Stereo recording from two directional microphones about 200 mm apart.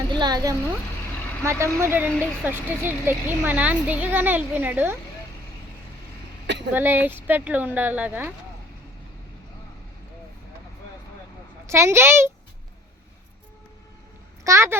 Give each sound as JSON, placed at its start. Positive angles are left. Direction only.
{"t": 0.1, "sound": "a woman's voice", "side_deg": -20}
{"t": 6.7, "sound": "a woman's voice", "side_deg": -10}
{"t": 11.6, "sound": "a woman's voice", "side_deg": -15}
{"t": 14.4, "sound": "a child's voice", "side_deg": -15}